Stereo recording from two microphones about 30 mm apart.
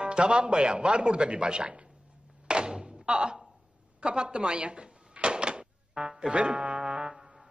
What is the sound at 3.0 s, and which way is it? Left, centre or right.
Speech, right.